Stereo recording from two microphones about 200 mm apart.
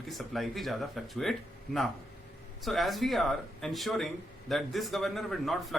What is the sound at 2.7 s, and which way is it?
Speech, centre (ahead or behind).